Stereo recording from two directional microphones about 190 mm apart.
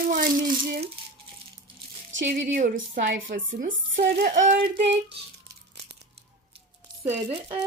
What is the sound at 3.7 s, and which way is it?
Speech, 80° right.